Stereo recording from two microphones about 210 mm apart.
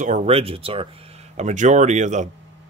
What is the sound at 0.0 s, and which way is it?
Speech, 35° right (ahead or behind).